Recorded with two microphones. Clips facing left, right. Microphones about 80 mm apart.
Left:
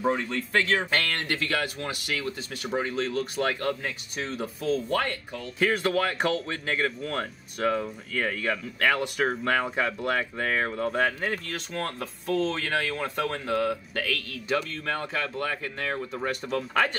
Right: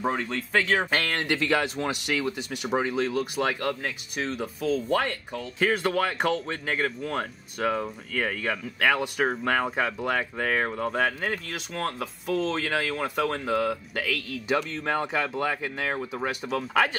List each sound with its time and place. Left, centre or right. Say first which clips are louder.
0.6 s speech: right 1 dB; centre
14.7 s speech: right 3 dB; centre